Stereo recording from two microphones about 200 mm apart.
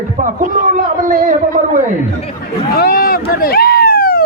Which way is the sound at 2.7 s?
45° left (ahead or behind).